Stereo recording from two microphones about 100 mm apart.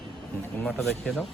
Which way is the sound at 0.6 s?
15° left (ahead or behind).